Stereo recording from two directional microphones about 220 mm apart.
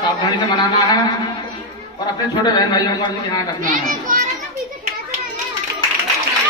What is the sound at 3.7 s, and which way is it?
Speech, 35° right (ahead or behind).